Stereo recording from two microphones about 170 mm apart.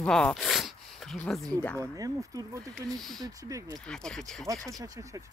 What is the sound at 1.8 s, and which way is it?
Speech, 20° right (ahead or behind).